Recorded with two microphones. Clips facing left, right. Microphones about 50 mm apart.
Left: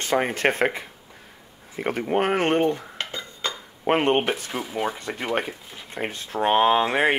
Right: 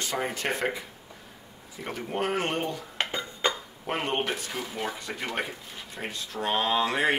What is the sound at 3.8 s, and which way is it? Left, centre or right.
Speech, left.